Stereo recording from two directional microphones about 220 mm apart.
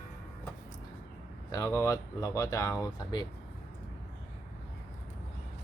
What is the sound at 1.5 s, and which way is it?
Speech, 15° left (ahead or behind).